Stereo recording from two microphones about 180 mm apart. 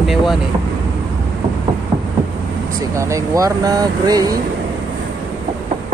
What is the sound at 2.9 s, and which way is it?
Speech, 15° right (ahead or behind).